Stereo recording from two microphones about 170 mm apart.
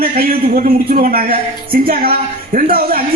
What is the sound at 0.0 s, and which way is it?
A man's voice, 60° right (ahead or behind).